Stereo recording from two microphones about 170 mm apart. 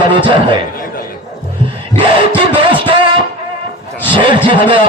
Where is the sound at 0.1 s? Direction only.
30° right (ahead or behind).